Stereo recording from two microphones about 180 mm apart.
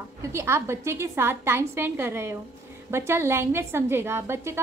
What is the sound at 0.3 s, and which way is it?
A woman's voice, 15° right (ahead or behind).